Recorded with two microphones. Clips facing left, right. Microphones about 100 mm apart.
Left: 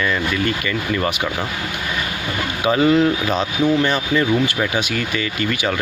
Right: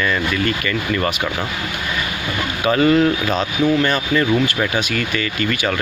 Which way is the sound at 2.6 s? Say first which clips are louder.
Right 1 dB; 15° left (ahead or behind).